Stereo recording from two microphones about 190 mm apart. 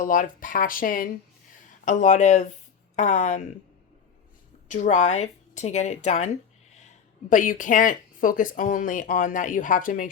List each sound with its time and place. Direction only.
0.0 s speech: 45° left (ahead or behind)
4.7 s speech: 40° left (ahead or behind)